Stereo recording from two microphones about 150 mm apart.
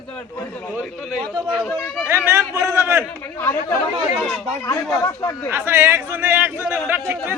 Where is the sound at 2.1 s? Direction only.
20° right (ahead or behind).